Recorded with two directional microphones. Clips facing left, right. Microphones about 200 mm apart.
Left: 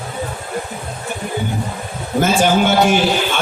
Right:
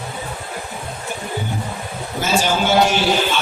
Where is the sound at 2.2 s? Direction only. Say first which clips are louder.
Left 5 dB; 55° left (ahead or behind).